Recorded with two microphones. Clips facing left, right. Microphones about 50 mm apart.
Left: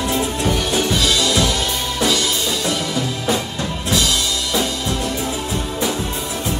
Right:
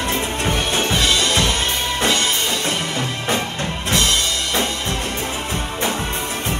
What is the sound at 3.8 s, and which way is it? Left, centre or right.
Drum kit, right.